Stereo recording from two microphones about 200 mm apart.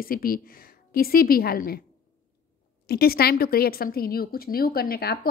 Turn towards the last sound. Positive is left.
turn(degrees=50)  # may be behind; listen again after turning